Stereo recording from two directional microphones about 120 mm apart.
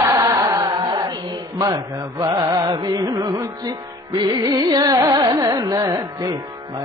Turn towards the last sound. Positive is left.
turn(degrees=-30)  # may be behind; listen again after turning